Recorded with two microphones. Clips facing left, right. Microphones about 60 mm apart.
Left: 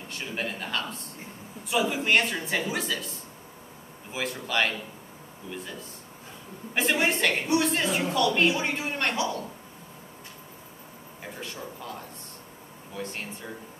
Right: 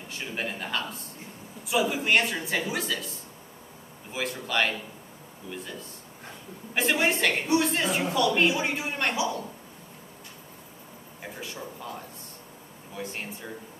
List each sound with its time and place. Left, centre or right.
0.2 s a woman's voice: centre
4.1 s a woman's voice: centre
9.2 s a woman's voice: right
12.9 s a woman's voice: centre